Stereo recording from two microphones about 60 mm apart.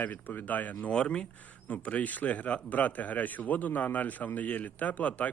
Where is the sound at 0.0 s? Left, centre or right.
Left.